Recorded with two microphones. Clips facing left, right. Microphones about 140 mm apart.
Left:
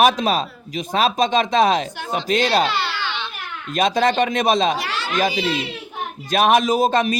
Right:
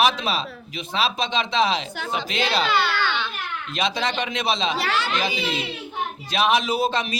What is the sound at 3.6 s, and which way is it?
A man's voice, 45° left (ahead or behind).